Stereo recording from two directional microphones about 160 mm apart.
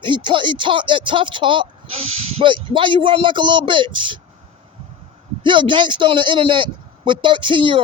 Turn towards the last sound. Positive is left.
turn(degrees=-30)  # may be behind; listen again after turning